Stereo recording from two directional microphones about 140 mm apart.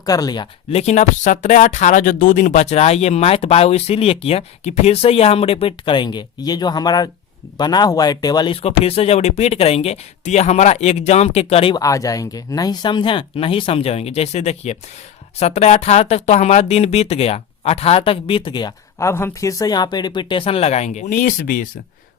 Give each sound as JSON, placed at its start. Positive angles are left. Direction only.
{"t": 0.0, "sound": "speech", "side_deg": 25}
{"t": 0.7, "sound": "speech", "side_deg": 50}
{"t": 8.6, "sound": "speech", "side_deg": 45}
{"t": 11.8, "sound": "speech", "side_deg": 25}
{"t": 18.9, "sound": "speech", "side_deg": 20}